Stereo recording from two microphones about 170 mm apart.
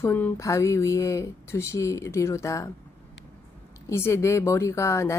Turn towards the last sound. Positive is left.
turn(degrees=15)  # may be behind; listen again after turning